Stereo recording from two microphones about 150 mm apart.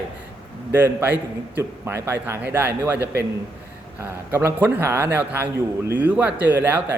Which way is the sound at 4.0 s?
15° right (ahead or behind).